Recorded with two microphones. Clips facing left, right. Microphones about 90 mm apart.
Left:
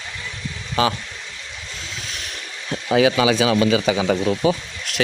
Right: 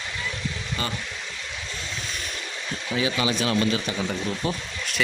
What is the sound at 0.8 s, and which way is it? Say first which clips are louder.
Speech: left 12 dB; 85° left.